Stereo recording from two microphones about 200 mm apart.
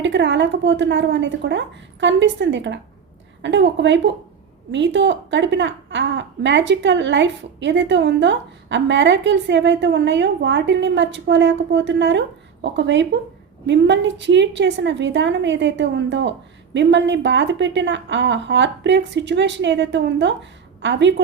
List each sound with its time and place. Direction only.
0.0 s a woman's voice: 65° right (ahead or behind)